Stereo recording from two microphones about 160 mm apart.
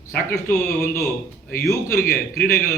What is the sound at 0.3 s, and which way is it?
A man's voice, 15° left (ahead or behind).